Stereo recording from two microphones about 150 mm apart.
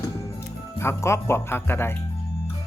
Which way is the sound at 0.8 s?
15° left (ahead or behind).